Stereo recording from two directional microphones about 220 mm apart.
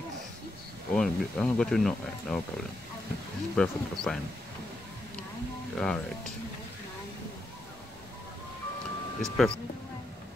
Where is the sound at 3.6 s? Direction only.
5° left (ahead or behind).